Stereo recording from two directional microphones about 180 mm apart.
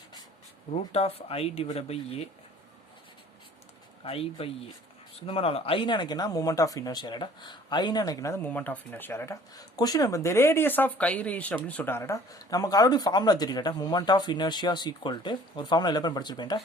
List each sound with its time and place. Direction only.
0.7 s speech: 35° left (ahead or behind)
4.0 s speech: 30° left (ahead or behind)